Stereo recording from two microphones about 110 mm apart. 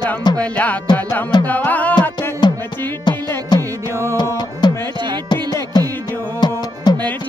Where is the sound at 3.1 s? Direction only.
45° left (ahead or behind).